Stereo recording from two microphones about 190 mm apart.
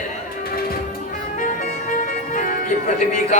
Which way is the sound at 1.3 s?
45° left (ahead or behind).